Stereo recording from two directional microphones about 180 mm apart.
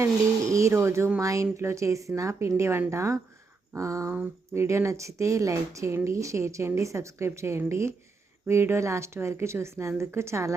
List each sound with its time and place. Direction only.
0.0 s speech: 15° right (ahead or behind)